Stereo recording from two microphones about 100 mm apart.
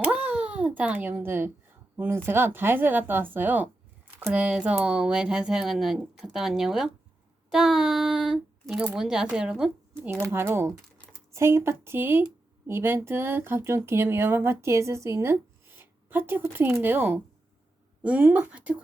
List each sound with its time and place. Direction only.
0.0 s a sound: 10° right (ahead or behind)
2.0 s speech: 25° right (ahead or behind); by 6.9 s 5° right (ahead or behind)
7.5 s child singing: 5° right (ahead or behind)
9.3 s speech: 10° right (ahead or behind)
10.2 s speech: 25° right (ahead or behind)